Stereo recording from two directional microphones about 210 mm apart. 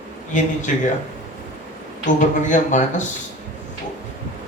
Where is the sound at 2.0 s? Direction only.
35° left (ahead or behind).